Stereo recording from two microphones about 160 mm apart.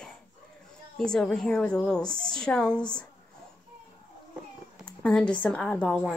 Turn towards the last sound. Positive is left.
turn(degrees=5)  # may be behind; listen again after turning